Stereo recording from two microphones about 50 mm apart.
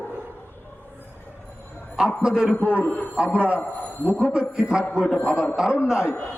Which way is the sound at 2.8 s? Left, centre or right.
Left.